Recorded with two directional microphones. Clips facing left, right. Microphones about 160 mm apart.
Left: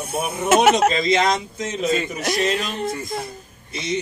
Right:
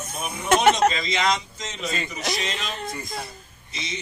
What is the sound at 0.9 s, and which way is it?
A man's voice, 50° left (ahead or behind).